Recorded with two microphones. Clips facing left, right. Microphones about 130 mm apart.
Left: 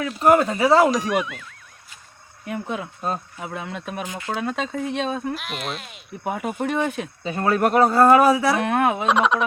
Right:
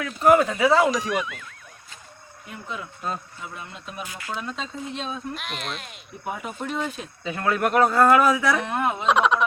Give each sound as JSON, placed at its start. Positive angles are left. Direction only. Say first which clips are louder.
{"t": 0.3, "sound": "a man's voice", "louder": "left 1 dB", "side_deg": 35}
{"t": 0.9, "sound": "speech", "louder": "left 3 dB", "side_deg": 0}
{"t": 2.5, "sound": "speech", "louder": "left 7 dB", "side_deg": 65}
{"t": 3.4, "sound": "speech", "louder": "left 7 dB", "side_deg": 85}
{"t": 4.0, "sound": "speech", "louder": "left 5 dB", "side_deg": 20}
{"t": 4.4, "sound": "speech", "louder": "left 8 dB", "side_deg": 65}
{"t": 5.3, "sound": "speech", "louder": "left 4 dB", "side_deg": 0}
{"t": 6.2, "sound": "speech", "louder": "left 6 dB", "side_deg": 60}
{"t": 7.3, "sound": "a man's voice", "louder": "left 3 dB", "side_deg": 35}
{"t": 8.6, "sound": "speech", "louder": "left 5 dB", "side_deg": 70}
{"t": 9.0, "sound": "speech", "louder": "left 1 dB", "side_deg": 0}